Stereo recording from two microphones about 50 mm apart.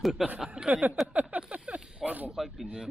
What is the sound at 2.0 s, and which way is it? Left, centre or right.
Snake, right.